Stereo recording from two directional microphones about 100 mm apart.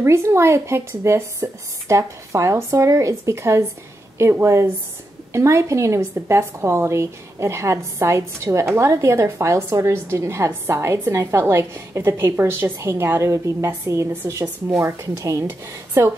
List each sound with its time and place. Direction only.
0.0 s a woman's voice: 30° right (ahead or behind)